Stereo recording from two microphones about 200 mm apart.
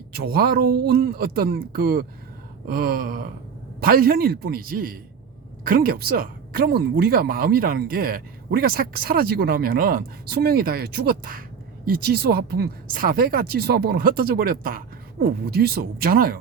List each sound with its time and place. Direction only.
0.1 s speech: 50° right (ahead or behind)